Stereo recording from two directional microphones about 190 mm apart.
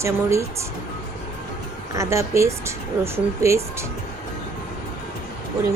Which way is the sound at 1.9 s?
15° right (ahead or behind).